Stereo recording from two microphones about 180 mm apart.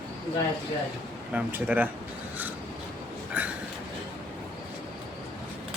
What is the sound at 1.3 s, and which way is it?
Speech, 10° right (ahead or behind).